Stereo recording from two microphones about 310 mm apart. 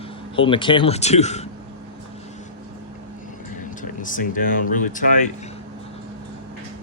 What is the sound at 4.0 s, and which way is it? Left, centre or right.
Speech, left.